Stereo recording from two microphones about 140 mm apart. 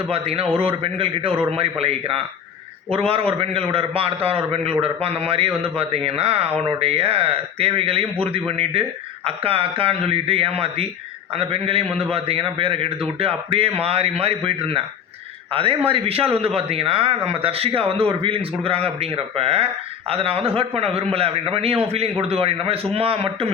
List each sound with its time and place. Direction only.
0.1 s a man's voice: 45° right (ahead or behind)